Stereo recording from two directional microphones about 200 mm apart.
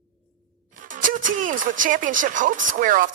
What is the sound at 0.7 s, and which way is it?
Speech, 40° right (ahead or behind).